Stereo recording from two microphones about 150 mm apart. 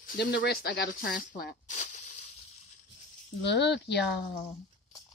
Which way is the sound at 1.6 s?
55° left (ahead or behind).